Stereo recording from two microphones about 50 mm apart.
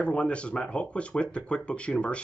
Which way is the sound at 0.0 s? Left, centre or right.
Left.